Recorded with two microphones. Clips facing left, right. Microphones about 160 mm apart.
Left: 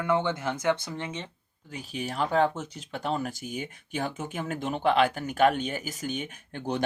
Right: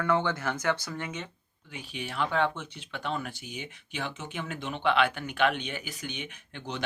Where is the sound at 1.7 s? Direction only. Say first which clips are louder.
Left 4 dB; 40° left (ahead or behind).